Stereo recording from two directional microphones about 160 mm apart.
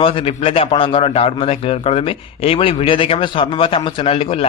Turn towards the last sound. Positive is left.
turn(degrees=35)  # may be behind; listen again after turning